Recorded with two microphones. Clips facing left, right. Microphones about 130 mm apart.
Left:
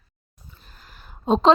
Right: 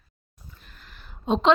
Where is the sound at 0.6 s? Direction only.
40° left (ahead or behind).